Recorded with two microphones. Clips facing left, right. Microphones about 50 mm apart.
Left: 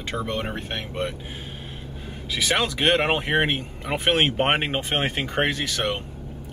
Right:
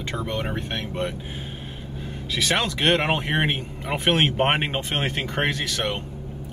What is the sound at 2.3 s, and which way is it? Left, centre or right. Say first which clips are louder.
Speech: even; centre.